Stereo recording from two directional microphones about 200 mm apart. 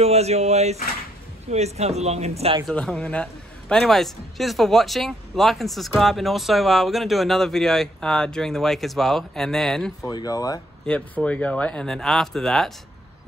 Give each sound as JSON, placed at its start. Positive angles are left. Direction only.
{"t": 0.0, "sound": "speech", "side_deg": -30}
{"t": 2.6, "sound": "speech", "side_deg": 5}
{"t": 10.0, "sound": "speech", "side_deg": 15}
{"t": 10.9, "sound": "speech", "side_deg": 5}